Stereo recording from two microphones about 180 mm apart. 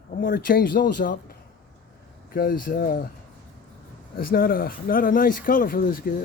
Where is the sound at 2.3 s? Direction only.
50° left (ahead or behind).